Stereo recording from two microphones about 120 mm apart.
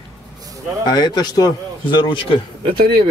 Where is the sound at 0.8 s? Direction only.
35° left (ahead or behind).